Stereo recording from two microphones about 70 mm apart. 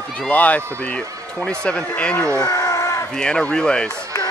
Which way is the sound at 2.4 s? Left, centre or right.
Left.